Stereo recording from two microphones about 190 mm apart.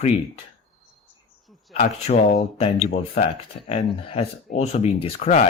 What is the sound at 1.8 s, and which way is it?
Speech, 35° left (ahead or behind).